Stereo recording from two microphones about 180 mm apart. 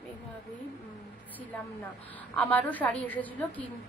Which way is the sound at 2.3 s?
10° left (ahead or behind).